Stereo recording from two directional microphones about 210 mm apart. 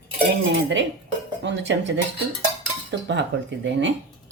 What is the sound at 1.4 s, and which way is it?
Speech, 60° right (ahead or behind).